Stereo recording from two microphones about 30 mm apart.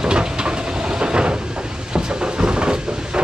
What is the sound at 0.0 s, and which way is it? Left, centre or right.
Vehicle, right.